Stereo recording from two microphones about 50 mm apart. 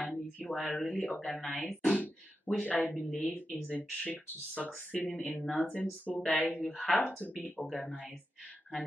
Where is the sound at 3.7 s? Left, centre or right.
Left.